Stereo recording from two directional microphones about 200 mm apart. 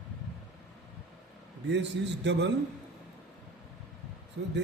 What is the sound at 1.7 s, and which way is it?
Speech, 60° right (ahead or behind).